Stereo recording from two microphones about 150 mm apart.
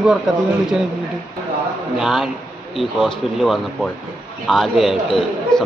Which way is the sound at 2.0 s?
Centre (ahead or behind).